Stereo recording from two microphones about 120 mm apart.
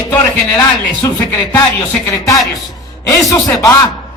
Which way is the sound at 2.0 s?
30° left (ahead or behind).